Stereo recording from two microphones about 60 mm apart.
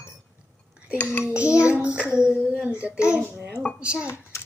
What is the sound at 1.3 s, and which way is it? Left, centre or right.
Child singing, centre.